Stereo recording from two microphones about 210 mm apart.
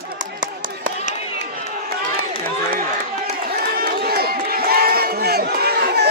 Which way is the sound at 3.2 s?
45° right (ahead or behind).